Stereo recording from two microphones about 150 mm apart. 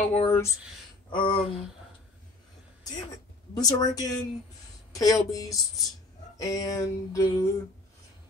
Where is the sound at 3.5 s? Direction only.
25° left (ahead or behind).